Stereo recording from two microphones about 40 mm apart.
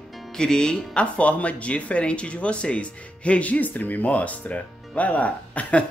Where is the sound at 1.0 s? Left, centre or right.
Left.